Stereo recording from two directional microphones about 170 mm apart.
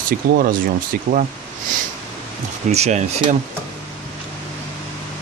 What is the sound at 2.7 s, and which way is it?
Speech, 40° right (ahead or behind).